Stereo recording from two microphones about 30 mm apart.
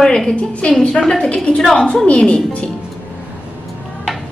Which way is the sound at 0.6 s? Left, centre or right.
Left.